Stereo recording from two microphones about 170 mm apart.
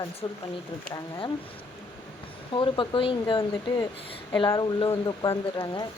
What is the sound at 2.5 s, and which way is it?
Speech, 30° left (ahead or behind).